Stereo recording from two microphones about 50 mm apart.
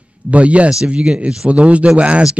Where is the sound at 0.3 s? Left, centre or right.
Right.